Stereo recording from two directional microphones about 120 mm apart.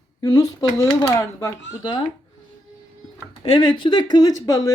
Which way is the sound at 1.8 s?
40° left (ahead or behind).